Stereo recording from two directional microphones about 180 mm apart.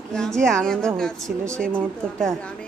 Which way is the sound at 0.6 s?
5° left (ahead or behind).